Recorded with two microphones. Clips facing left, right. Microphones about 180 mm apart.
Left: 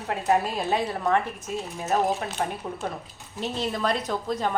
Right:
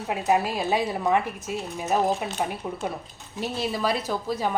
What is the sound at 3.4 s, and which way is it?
Speech, 10° right (ahead or behind).